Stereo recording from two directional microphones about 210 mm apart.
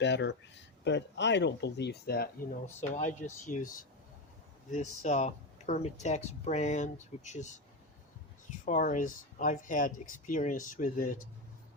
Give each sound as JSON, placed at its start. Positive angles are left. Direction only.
{"t": 0.0, "sound": "speech", "side_deg": 55}
{"t": 2.9, "sound": "speech", "side_deg": 35}
{"t": 8.6, "sound": "speech", "side_deg": 40}